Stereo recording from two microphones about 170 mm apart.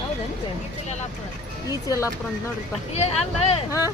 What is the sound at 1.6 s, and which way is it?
Speech, 20° left (ahead or behind).